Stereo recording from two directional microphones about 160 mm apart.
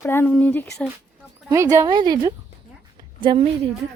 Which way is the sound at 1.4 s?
20° right (ahead or behind).